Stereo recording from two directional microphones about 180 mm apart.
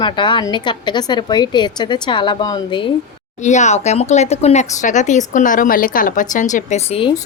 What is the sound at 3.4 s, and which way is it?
Speech, 40° left (ahead or behind).